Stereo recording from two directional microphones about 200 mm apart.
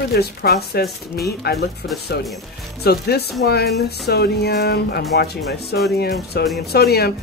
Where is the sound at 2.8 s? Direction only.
55° left (ahead or behind).